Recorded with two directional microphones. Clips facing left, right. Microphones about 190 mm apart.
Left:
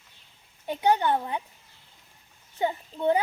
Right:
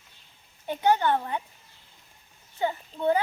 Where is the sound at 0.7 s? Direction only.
15° left (ahead or behind).